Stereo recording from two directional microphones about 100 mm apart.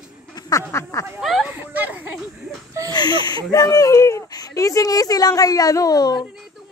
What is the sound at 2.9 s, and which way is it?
Speech, 45° left (ahead or behind).